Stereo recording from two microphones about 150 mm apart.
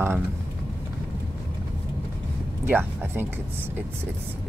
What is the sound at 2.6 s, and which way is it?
Speech, 15° right (ahead or behind).